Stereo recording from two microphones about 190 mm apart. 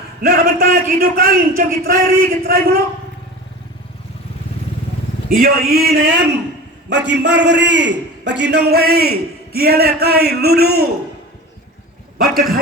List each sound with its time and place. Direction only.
0.2 s a man's voice: 50° right (ahead or behind)
5.3 s a man's voice: 50° right (ahead or behind)